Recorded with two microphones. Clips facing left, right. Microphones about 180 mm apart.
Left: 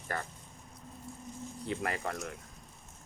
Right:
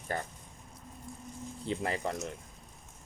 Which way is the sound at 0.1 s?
25° right (ahead or behind).